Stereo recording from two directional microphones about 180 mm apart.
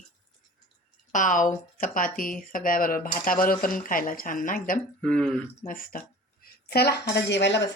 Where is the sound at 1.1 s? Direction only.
45° left (ahead or behind).